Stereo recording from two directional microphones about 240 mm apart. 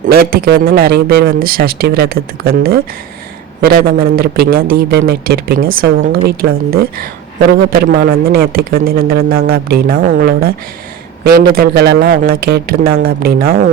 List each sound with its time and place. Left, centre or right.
0.1 s speech: right